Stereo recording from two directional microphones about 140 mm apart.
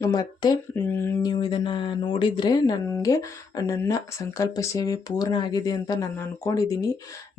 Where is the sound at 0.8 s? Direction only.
15° left (ahead or behind).